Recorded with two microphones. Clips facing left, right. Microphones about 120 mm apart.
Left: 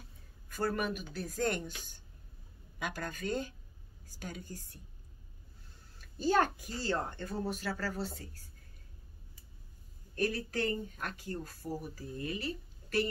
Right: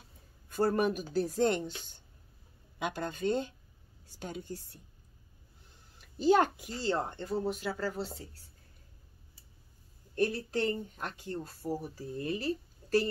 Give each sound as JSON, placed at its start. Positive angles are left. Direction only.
{"t": 0.5, "sound": "speech", "side_deg": -30}
{"t": 5.9, "sound": "speech", "side_deg": -15}
{"t": 10.1, "sound": "speech", "side_deg": -25}